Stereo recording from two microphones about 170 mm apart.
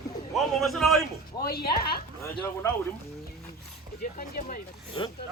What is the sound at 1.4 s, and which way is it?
Speech, 65° left (ahead or behind).